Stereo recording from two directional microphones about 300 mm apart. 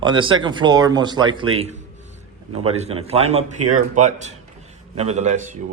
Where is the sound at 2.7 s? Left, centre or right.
Right.